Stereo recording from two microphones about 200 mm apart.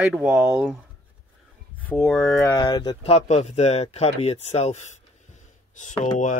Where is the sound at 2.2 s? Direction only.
15° left (ahead or behind); by 4.8 s 35° left (ahead or behind).